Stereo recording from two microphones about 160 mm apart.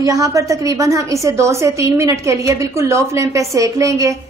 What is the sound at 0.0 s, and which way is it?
A woman's voice, 20° right (ahead or behind).